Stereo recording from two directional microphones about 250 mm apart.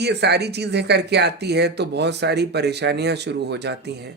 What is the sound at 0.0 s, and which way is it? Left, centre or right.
Speech, right.